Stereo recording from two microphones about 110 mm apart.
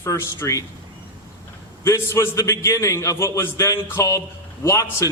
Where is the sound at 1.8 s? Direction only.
25° left (ahead or behind).